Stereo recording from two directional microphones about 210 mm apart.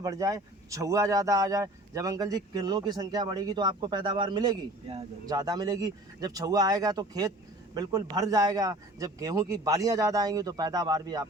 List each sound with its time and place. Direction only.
0.0 s speech: 15° right (ahead or behind)